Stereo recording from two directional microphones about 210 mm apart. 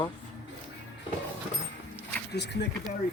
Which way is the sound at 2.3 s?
55° left (ahead or behind).